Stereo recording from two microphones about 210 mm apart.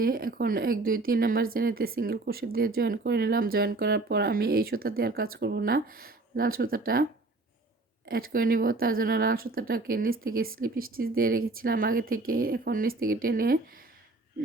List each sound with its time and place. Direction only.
0.0 s a woman's voice: 45° right (ahead or behind)